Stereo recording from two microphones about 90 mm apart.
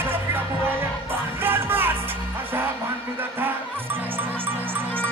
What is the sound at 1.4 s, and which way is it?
Music, 25° right (ahead or behind).